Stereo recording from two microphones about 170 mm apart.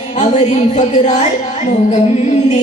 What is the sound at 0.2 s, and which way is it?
Music, 40° left (ahead or behind).